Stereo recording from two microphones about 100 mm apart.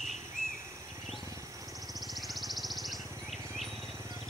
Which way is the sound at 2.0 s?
Centre (ahead or behind).